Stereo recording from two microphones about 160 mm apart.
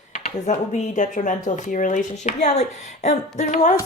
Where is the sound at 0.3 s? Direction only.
45° left (ahead or behind).